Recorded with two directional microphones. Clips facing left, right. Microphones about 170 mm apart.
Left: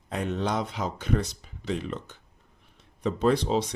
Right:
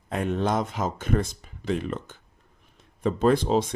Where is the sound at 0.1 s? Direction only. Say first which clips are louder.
Right 3 dB; 50° right (ahead or behind).